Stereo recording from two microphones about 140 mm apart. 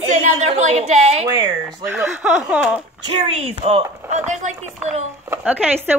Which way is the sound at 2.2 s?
5° right (ahead or behind).